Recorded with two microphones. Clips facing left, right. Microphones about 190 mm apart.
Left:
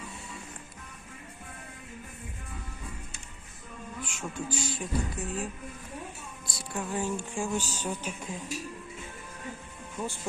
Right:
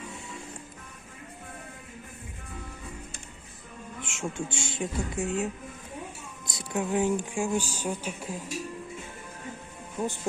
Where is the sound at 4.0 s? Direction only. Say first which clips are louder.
Right 3 dB; 25° right (ahead or behind).